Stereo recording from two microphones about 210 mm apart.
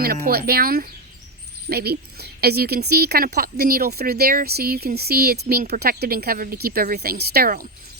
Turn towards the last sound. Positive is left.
turn(degrees=-45)  # may be behind; listen again after turning